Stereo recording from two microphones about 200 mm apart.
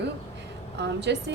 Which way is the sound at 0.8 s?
60° right (ahead or behind).